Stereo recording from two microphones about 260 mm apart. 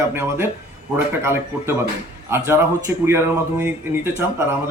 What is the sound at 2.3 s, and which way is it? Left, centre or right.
Speech, centre.